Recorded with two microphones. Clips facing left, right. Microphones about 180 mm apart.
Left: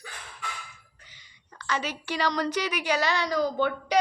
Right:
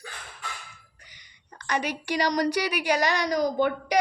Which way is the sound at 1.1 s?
15° right (ahead or behind).